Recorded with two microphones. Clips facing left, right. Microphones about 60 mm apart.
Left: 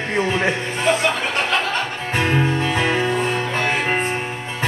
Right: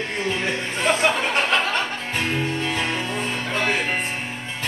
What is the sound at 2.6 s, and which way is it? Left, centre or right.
Music, centre.